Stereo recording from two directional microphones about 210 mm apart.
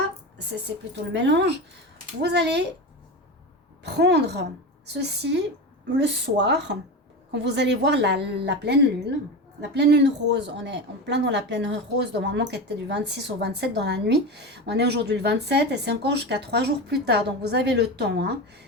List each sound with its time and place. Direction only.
1.1 s a woman's voice: 55° right (ahead or behind)
3.8 s a woman's voice: 55° right (ahead or behind)